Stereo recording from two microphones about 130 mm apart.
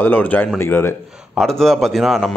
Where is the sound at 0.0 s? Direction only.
15° left (ahead or behind).